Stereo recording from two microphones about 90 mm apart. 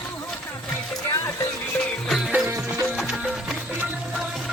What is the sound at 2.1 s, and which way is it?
Music, 5° right (ahead or behind).